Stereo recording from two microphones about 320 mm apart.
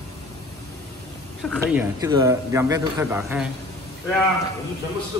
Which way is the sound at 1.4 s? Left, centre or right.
Centre.